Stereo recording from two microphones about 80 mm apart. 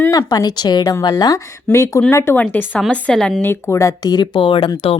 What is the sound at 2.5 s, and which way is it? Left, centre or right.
Speech, left.